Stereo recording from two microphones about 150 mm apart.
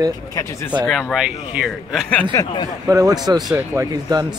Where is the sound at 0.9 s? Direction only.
Centre (ahead or behind).